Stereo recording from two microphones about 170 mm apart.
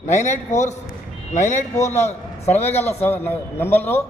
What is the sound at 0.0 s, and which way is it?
A man's voice, 45° left (ahead or behind).